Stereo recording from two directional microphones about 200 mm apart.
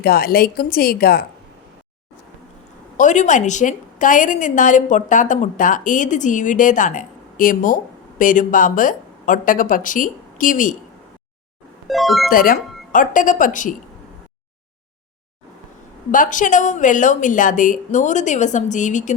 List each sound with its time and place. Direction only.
0.0 s a woman's voice: 50° left (ahead or behind)
3.0 s a woman's voice: 40° left (ahead or behind)
11.9 s speech: centre (ahead or behind)
12.3 s a woman's voice: 45° left (ahead or behind)
16.1 s a woman's voice: 40° left (ahead or behind)